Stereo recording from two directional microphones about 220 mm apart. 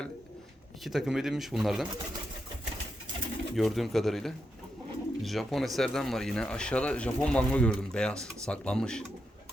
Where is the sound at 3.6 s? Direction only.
Centre (ahead or behind).